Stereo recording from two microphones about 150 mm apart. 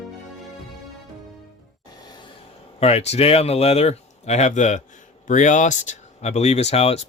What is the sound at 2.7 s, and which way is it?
Speech, 45° left (ahead or behind).